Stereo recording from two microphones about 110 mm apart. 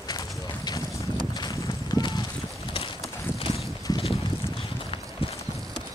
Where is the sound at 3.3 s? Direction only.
55° left (ahead or behind).